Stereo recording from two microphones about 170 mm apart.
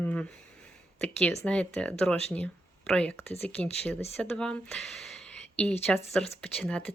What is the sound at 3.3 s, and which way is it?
Speech, 40° left (ahead or behind).